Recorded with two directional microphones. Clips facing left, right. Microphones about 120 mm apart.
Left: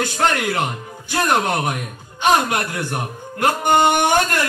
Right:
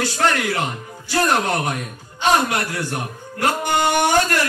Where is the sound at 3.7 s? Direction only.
20° left (ahead or behind).